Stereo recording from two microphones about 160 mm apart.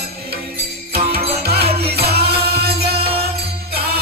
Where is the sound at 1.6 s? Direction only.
40° right (ahead or behind).